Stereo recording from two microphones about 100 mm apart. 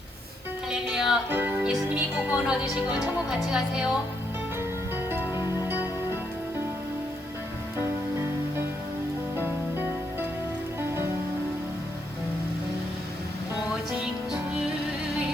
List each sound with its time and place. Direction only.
0.7 s music: 5° right (ahead or behind)
1.3 s music: 20° right (ahead or behind)
1.6 s speech: 10° right (ahead or behind)
5.3 s music: 45° left (ahead or behind)
9.3 s music: 20° right (ahead or behind)